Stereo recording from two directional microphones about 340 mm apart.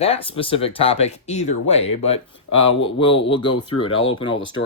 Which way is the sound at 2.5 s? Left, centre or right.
Left.